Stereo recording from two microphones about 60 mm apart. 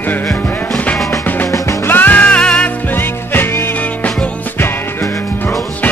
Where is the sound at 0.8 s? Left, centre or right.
Left.